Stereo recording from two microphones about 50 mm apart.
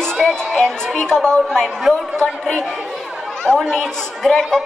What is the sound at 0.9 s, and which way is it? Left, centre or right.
Speech, centre.